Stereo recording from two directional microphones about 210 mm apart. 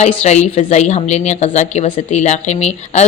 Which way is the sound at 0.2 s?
30° left (ahead or behind).